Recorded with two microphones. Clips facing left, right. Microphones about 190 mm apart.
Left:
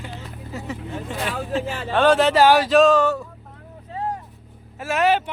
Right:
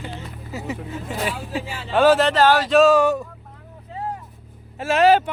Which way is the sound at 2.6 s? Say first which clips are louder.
Right 1 dB; 5° right (ahead or behind).